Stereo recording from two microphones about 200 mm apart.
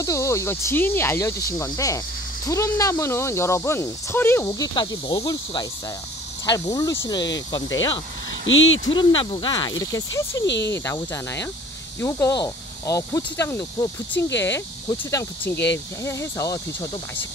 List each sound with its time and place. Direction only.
0.0 s speech: 15° left (ahead or behind)
8.5 s speech: 75° left (ahead or behind)
8.8 s speech: 20° left (ahead or behind)
10.4 s cricket: 60° left (ahead or behind)
10.7 s speech: 10° left (ahead or behind)